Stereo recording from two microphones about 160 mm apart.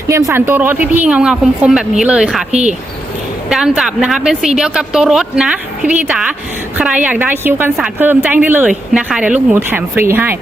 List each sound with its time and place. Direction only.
0.1 s a woman's voice: 20° right (ahead or behind)
2.5 s speech: 45° right (ahead or behind)
3.8 s a woman's voice: 5° right (ahead or behind)